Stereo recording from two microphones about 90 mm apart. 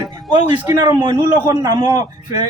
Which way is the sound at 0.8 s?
55° right (ahead or behind).